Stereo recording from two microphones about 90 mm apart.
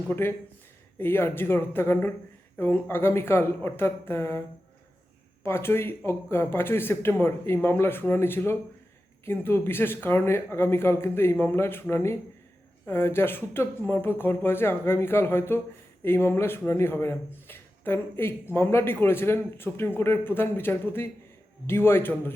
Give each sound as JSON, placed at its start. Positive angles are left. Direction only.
{"t": 0.1, "sound": "speech", "side_deg": 25}